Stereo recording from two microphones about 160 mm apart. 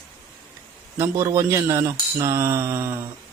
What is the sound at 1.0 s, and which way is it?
A man's voice, 15° right (ahead or behind).